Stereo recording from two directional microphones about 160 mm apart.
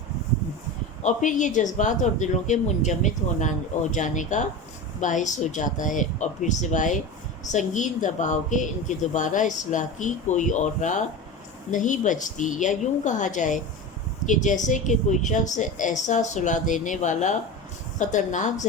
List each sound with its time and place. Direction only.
1.0 s a woman's voice: 50° left (ahead or behind)